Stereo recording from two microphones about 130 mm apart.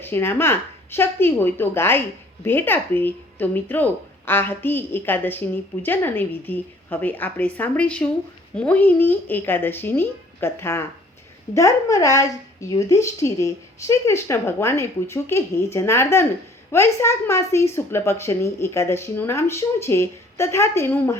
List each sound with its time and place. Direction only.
0.0 s a woman's voice: 15° left (ahead or behind)